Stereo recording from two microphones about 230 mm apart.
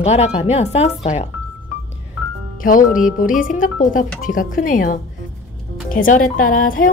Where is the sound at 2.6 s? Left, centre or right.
Left.